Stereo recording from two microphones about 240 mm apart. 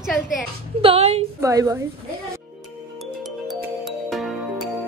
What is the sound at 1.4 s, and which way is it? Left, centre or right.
Speech, centre.